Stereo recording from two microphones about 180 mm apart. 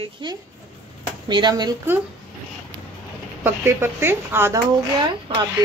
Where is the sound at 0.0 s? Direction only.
25° right (ahead or behind).